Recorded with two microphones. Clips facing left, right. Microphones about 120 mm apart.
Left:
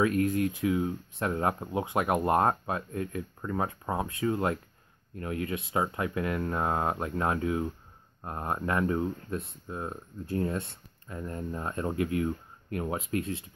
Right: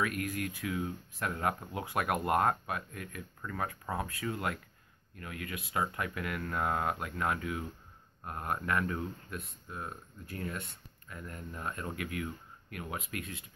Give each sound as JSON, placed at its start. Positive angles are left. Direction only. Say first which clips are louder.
{"t": 0.0, "sound": "speech", "louder": "left 9 dB", "side_deg": 25}